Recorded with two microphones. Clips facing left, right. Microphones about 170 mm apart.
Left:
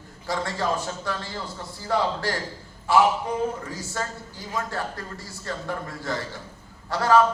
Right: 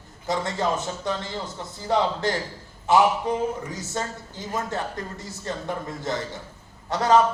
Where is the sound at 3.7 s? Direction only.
20° right (ahead or behind).